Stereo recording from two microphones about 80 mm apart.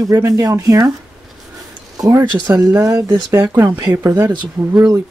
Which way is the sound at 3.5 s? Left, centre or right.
Right.